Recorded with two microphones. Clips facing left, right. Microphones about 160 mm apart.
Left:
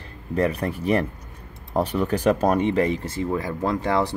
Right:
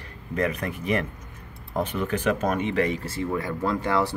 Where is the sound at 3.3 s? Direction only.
20° left (ahead or behind).